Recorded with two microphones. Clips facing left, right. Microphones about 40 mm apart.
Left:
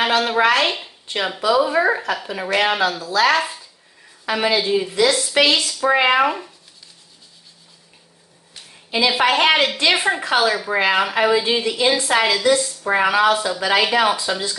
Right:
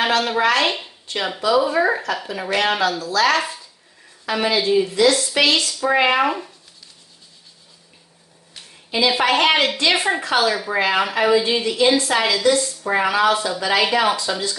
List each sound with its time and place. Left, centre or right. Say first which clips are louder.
0.0 s a woman's voice: left 1 dB; centre
3.3 s a woman's voice: left 1 dB; centre
8.9 s a woman's voice: left 1 dB; centre